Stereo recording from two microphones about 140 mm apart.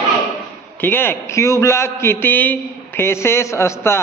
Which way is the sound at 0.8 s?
15° left (ahead or behind).